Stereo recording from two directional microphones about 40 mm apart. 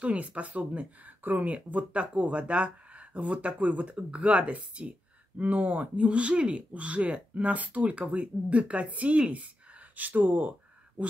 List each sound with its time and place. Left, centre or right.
0.0 s speech: right